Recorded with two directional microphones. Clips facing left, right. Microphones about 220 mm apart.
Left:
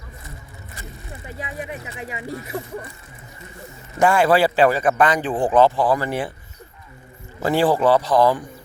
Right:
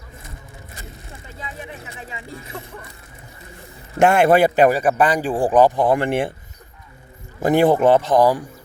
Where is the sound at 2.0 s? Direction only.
15° left (ahead or behind).